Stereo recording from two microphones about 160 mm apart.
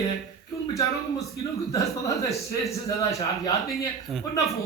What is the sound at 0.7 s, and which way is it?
A man's voice, 20° left (ahead or behind).